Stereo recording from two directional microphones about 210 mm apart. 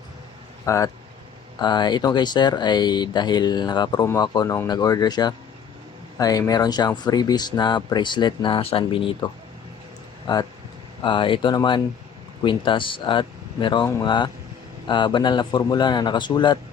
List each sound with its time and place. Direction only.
0.6 s speech: 15° left (ahead or behind)
11.0 s speech: 25° left (ahead or behind)